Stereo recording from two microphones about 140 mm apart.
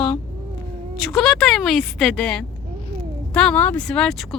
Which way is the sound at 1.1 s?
5° left (ahead or behind).